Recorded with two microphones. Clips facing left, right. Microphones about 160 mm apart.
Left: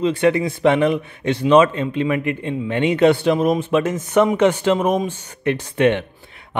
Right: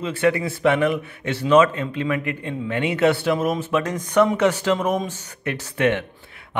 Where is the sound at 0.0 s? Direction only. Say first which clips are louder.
Left 4 dB; 20° left (ahead or behind).